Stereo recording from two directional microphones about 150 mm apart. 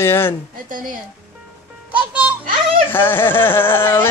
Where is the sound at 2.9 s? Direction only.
15° left (ahead or behind).